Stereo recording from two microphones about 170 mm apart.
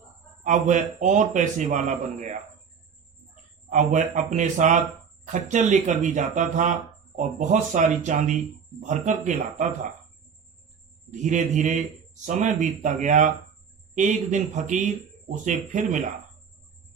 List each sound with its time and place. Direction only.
0.4 s a man's voice: 45° right (ahead or behind)
3.7 s a man's voice: 45° right (ahead or behind)
11.1 s a man's voice: 45° right (ahead or behind)